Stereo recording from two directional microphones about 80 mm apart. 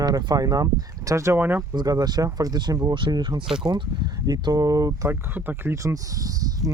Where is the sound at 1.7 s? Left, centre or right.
Right.